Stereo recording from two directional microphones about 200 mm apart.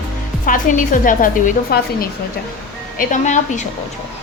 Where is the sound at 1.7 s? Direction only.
50° left (ahead or behind).